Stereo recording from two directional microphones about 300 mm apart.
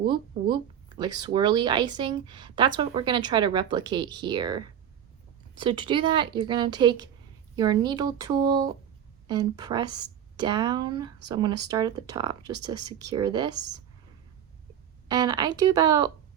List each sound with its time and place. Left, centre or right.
0.0 s speech: centre
15.0 s speech: centre